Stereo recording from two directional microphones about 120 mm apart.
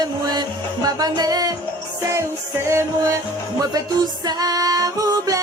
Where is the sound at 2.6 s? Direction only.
25° right (ahead or behind).